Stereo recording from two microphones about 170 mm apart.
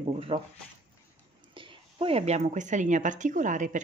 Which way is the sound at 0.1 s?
35° right (ahead or behind).